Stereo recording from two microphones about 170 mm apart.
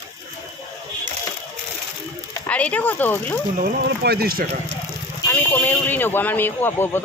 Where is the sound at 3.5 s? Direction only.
60° right (ahead or behind).